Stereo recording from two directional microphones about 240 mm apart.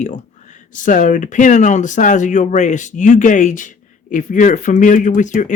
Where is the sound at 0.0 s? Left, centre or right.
Left.